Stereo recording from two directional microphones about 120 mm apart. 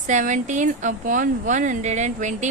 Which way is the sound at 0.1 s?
90° right.